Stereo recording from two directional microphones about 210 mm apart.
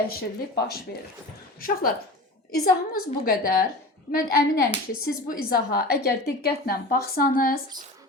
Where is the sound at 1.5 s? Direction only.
45° left (ahead or behind).